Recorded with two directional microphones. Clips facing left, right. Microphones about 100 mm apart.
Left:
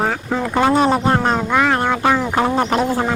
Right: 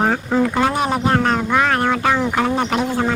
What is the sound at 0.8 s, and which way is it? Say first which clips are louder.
Speech: left 2 dB; 25° left (ahead or behind).